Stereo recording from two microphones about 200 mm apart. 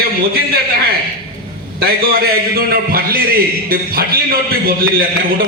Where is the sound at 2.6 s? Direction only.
50° right (ahead or behind).